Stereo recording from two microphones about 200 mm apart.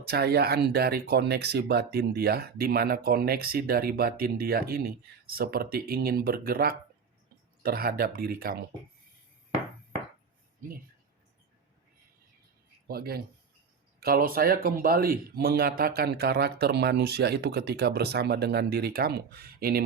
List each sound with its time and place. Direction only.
0.1 s speech: 50° right (ahead or behind)
12.9 s speech: 50° right (ahead or behind)